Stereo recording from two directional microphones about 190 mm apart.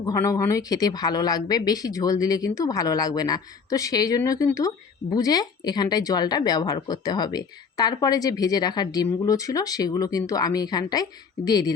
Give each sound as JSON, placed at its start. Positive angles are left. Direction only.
{"t": 0.0, "sound": "speech", "side_deg": 20}